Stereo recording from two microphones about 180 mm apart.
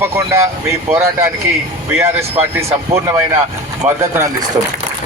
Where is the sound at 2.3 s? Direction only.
15° right (ahead or behind).